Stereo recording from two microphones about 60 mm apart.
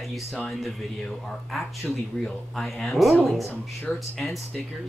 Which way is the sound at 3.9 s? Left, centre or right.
Left.